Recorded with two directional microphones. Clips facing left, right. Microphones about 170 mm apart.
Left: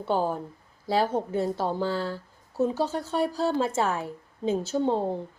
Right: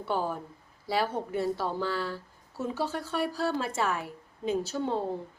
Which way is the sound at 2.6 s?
20° left (ahead or behind).